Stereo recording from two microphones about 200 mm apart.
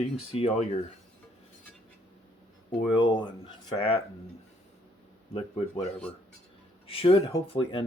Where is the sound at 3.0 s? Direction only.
20° left (ahead or behind).